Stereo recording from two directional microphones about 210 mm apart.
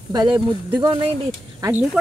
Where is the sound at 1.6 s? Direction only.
10° right (ahead or behind).